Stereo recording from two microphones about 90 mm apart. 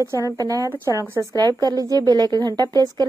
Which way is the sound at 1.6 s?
45° right (ahead or behind).